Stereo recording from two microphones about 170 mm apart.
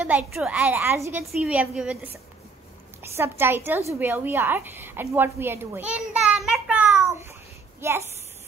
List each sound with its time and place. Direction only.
0.0 s a woman's voice: 10° right (ahead or behind)
3.0 s a woman's voice: 15° right (ahead or behind)
6.4 s child singing: centre (ahead or behind)
7.1 s babbling: 15° right (ahead or behind)
7.8 s a woman's voice: 15° right (ahead or behind)